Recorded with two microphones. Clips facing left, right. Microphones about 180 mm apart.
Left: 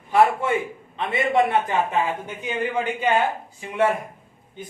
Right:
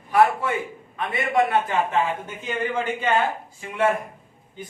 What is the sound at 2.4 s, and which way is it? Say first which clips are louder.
Speech: left 1 dB; 15° left (ahead or behind).